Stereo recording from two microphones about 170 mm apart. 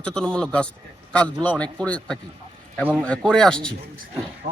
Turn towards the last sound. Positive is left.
turn(degrees=-40)  # may be behind; listen again after turning